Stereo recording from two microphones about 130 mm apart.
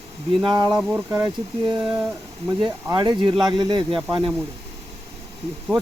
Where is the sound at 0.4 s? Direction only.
35° right (ahead or behind).